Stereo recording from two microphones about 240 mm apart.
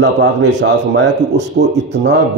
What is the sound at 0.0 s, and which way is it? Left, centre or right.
A man's voice, right.